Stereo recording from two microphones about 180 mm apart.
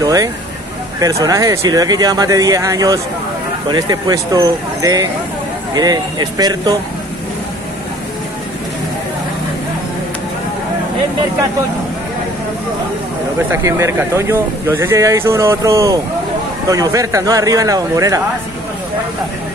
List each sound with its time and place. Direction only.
0.0 s speech: 20° right (ahead or behind)
13.5 s speech: 15° right (ahead or behind)